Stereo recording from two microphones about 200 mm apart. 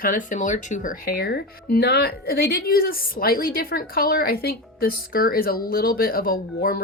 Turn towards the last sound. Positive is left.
turn(degrees=50)  # may be behind; listen again after turning